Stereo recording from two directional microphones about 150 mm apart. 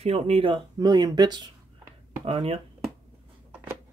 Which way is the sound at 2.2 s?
40° right (ahead or behind).